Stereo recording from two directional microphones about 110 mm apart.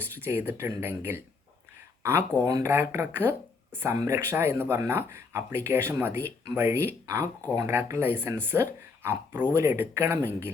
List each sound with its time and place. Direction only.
0.0 s speech: 20° right (ahead or behind)
2.5 s speech: 35° right (ahead or behind)